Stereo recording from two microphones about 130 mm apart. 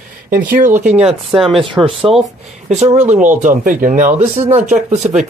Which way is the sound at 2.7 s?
60° right (ahead or behind).